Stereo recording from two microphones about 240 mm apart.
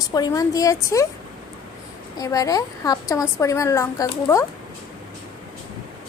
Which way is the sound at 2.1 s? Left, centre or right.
Centre.